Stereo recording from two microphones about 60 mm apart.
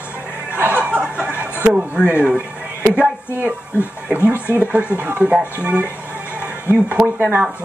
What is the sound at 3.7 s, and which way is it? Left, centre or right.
Speech, left.